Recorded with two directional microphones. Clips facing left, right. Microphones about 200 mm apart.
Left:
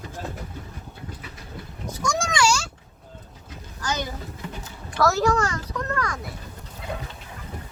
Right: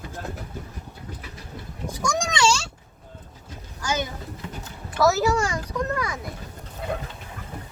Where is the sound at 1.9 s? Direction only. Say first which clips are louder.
Even; 15° right (ahead or behind).